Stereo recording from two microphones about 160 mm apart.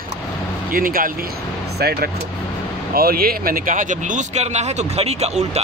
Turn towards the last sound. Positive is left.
turn(degrees=-45)  # may be behind; listen again after turning